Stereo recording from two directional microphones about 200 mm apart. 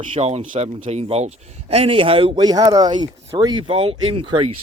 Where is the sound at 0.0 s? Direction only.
30° right (ahead or behind).